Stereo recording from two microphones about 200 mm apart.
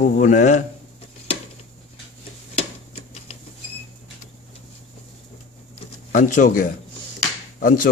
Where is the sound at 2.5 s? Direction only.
30° left (ahead or behind).